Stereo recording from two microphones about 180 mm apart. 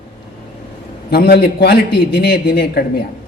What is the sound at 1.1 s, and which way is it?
A man's voice, 60° left (ahead or behind).